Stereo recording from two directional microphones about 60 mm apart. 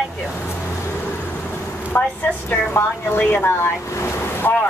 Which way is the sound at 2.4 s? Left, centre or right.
Left.